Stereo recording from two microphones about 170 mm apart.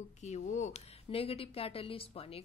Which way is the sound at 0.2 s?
45° left (ahead or behind).